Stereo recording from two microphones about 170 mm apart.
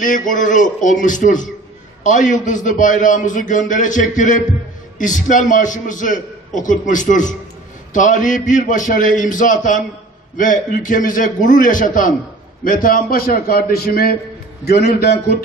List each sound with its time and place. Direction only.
0.0 s a man's voice: 50° left (ahead or behind); by 15.3 s 70° left (ahead or behind)